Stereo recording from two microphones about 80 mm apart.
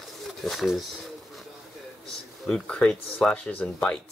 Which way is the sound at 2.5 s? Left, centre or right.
Centre.